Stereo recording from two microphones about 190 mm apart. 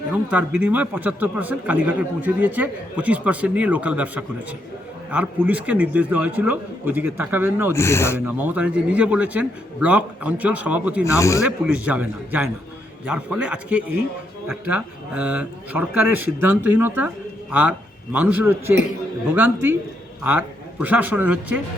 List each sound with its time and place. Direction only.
0.1 s a man's voice: 5° right (ahead or behind)
7.7 s speech: 15° left (ahead or behind)
8.3 s a man's voice: 10° right (ahead or behind)
11.0 s speech: 15° left (ahead or behind)
11.4 s a man's voice: 5° right (ahead or behind)